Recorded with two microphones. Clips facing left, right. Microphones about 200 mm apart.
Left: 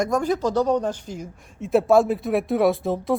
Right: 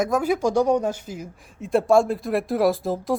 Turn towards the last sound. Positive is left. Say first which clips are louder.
# left 1 dB
turn(degrees=0)  # may be behind; listen again after turning